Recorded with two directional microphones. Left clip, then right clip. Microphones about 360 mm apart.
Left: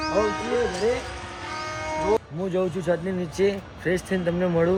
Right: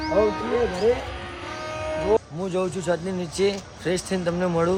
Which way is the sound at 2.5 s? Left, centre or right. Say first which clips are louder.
Even; centre.